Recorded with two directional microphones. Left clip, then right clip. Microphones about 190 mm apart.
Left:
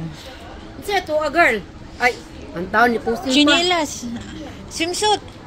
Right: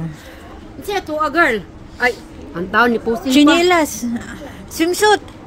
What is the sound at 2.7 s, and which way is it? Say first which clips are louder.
Speech: right 2 dB; 40° right (ahead or behind).